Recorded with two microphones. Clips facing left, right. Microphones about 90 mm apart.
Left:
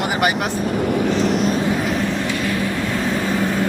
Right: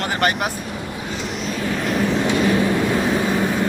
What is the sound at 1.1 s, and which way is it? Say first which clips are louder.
Vehicle: left 8 dB; 45° left (ahead or behind).